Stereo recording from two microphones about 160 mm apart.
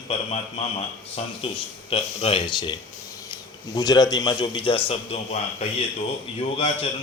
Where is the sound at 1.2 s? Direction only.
40° left (ahead or behind).